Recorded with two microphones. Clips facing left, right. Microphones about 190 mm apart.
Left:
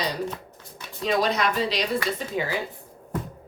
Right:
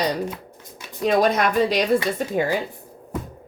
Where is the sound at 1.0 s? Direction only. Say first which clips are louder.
Right 5 dB; 50° right (ahead or behind).